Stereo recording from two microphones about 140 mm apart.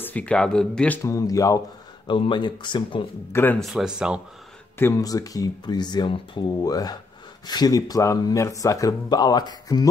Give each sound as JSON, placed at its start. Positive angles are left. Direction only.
{"t": 0.0, "sound": "speech", "side_deg": 10}
{"t": 1.0, "sound": "speech", "side_deg": 25}
{"t": 2.0, "sound": "speech", "side_deg": 35}
{"t": 3.5, "sound": "speech", "side_deg": 0}
{"t": 4.7, "sound": "speech", "side_deg": 20}